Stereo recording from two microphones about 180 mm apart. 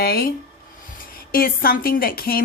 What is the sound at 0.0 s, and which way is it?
Speech, 55° left (ahead or behind).